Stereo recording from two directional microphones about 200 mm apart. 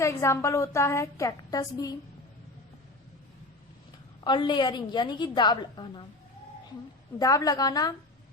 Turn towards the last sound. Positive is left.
turn(degrees=20)  # may be behind; listen again after turning